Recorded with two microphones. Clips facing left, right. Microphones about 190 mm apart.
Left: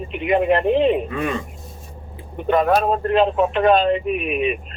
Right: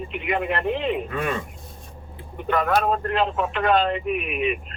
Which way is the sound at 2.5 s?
20° left (ahead or behind).